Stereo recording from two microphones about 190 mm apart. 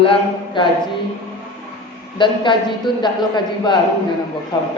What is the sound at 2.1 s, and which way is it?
A man's voice, 25° left (ahead or behind).